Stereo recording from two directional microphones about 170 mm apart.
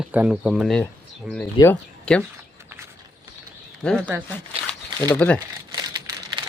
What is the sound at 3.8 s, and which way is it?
Speech, 5° left (ahead or behind).